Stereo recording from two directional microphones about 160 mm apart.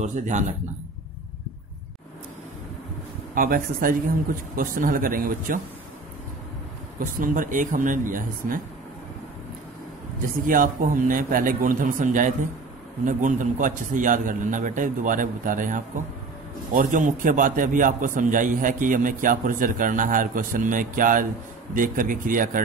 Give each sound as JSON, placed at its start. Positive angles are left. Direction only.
{"t": 0.0, "sound": "a man's voice", "side_deg": -50}
{"t": 3.3, "sound": "a man's voice", "side_deg": -60}
{"t": 7.0, "sound": "a man's voice", "side_deg": -60}
{"t": 10.2, "sound": "a man's voice", "side_deg": -60}